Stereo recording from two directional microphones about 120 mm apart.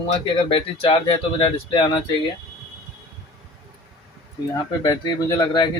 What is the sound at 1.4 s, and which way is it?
Speech, 40° left (ahead or behind).